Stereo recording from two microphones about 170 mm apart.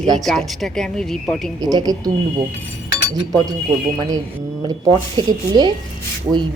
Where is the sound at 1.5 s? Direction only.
25° right (ahead or behind).